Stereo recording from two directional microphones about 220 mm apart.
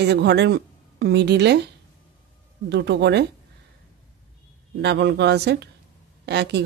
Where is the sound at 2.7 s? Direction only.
50° right (ahead or behind).